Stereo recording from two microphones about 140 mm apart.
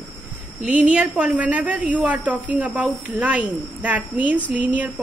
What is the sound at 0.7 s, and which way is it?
A woman's voice, 10° right (ahead or behind).